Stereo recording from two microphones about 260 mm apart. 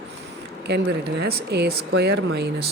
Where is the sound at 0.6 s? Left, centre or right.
Right.